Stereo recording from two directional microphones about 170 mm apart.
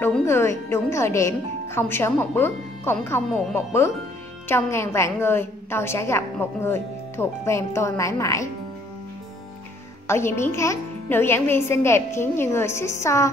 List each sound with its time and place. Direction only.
0.0 s a woman's voice: 15° left (ahead or behind)
10.0 s a woman's voice: 15° left (ahead or behind)